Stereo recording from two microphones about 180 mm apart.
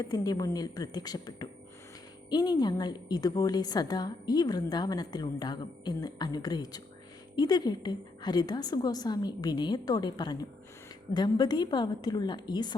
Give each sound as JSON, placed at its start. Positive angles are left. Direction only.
{"t": 0.0, "sound": "a woman's voice", "side_deg": 20}